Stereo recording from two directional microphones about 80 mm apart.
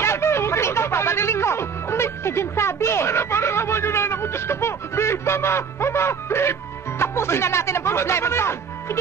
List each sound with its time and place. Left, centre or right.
0.0 s music: left
7.0 s speech: left